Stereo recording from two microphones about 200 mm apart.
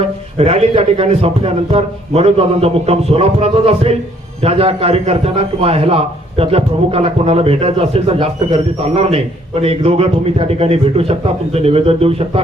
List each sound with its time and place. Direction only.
0.0 s a man's voice: 30° right (ahead or behind)